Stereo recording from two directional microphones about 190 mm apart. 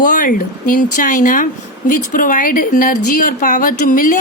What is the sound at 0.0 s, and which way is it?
A woman's voice, 45° left (ahead or behind).